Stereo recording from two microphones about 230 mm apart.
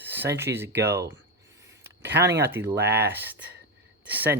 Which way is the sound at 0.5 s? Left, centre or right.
Centre.